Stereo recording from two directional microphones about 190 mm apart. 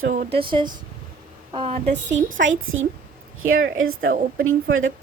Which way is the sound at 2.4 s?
90° right.